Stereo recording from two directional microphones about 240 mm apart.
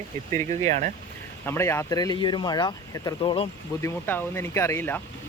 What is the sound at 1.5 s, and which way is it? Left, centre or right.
Speech, centre.